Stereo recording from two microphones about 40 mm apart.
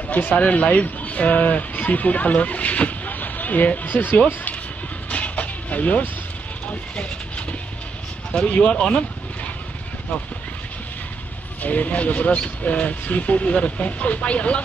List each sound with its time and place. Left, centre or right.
0.1 s speech: left
5.1 s vehicle: left
8.3 s speech: left
11.6 s speech: left